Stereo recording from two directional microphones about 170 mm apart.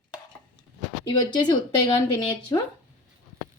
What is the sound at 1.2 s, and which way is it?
Speech, 25° left (ahead or behind).